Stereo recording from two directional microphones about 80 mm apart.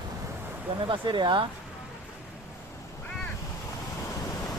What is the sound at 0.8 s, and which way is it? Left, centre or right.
Speech, right.